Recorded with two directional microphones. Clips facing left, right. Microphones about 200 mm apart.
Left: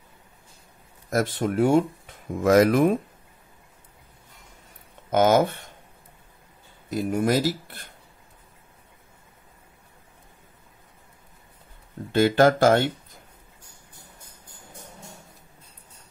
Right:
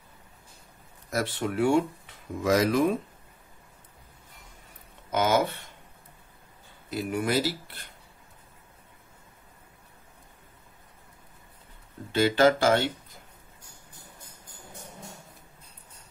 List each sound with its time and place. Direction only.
1.1 s speech: 45° left (ahead or behind)
5.1 s speech: 50° left (ahead or behind)
6.9 s speech: 45° left (ahead or behind)
12.1 s speech: 50° left (ahead or behind)